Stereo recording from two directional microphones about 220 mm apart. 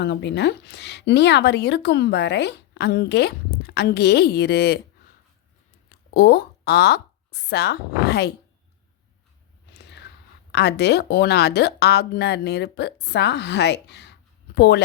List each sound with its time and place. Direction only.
0.0 s speech: 50° left (ahead or behind)
6.1 s speech: 45° left (ahead or behind)
9.7 s a sound: 50° left (ahead or behind)
10.5 s speech: 50° left (ahead or behind)